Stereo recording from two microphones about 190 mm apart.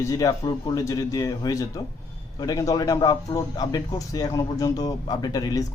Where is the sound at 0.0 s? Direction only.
15° left (ahead or behind).